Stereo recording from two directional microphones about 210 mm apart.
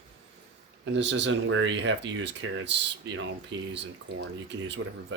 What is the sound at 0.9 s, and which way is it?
Speech, 60° right (ahead or behind).